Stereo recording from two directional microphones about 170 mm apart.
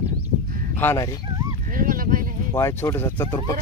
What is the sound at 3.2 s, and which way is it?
Speech, 25° left (ahead or behind).